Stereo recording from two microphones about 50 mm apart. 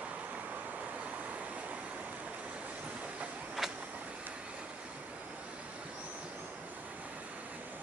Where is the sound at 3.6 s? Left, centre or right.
Centre.